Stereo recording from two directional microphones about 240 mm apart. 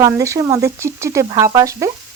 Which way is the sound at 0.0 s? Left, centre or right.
Centre.